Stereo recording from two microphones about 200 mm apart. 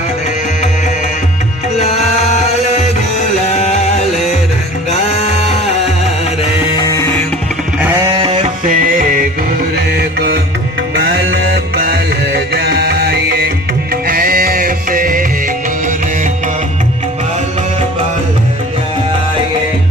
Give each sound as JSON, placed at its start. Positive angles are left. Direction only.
{"t": 1.8, "sound": "music", "side_deg": 35}
{"t": 6.7, "sound": "music", "side_deg": 15}
{"t": 7.8, "sound": "a sound", "side_deg": -10}
{"t": 8.2, "sound": "music", "side_deg": -25}
{"t": 8.6, "sound": "music", "side_deg": -40}